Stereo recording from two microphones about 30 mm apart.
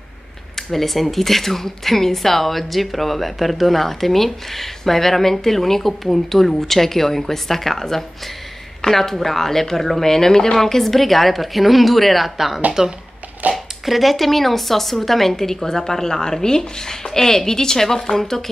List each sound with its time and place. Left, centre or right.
0.6 s speech: centre